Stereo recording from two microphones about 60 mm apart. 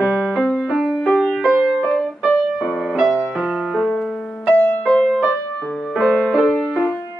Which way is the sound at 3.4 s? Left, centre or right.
Centre.